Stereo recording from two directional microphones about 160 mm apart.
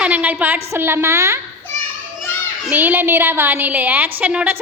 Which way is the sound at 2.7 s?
10° right (ahead or behind).